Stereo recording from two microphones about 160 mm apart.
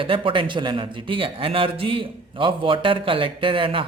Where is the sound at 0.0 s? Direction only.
30° right (ahead or behind).